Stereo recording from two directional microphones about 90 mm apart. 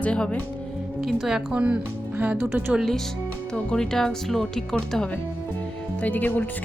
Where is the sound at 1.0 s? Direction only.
5° right (ahead or behind); by 2.7 s 20° right (ahead or behind).